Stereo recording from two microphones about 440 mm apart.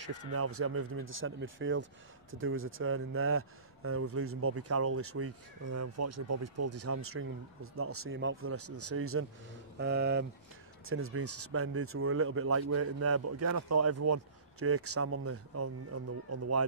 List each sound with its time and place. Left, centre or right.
0.0 s speech: right